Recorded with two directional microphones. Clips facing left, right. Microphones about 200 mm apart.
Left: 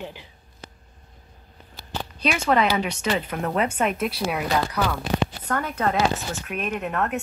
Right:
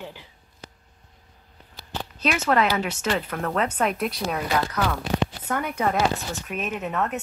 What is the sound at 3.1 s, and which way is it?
Speech, 10° left (ahead or behind).